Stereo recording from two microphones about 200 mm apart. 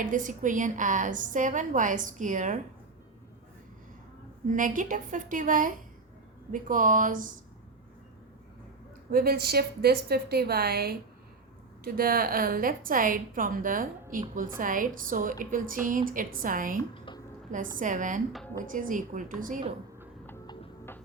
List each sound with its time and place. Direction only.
0.0 s a woman's voice: 40° right (ahead or behind)
4.4 s a woman's voice: 40° right (ahead or behind)
9.1 s a woman's voice: 50° right (ahead or behind)
16.9 s a sound: 25° left (ahead or behind)
17.7 s a woman's voice: 40° right (ahead or behind)
18.3 s speech: centre (ahead or behind)
18.6 s a woman's voice: 40° right (ahead or behind)